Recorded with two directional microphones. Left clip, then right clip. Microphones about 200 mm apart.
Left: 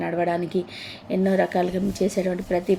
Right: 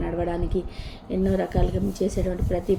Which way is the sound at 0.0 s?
15° left (ahead or behind).